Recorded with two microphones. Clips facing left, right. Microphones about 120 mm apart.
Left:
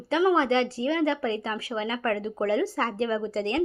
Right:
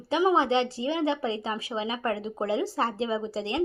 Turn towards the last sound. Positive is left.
turn(degrees=-15)  # may be behind; listen again after turning